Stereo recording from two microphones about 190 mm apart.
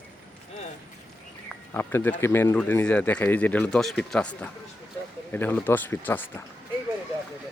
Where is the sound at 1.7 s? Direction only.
10° left (ahead or behind).